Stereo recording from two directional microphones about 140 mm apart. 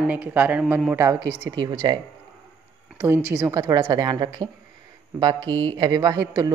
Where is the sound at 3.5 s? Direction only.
25° right (ahead or behind).